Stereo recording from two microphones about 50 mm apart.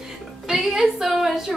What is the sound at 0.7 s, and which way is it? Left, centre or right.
Speech, centre.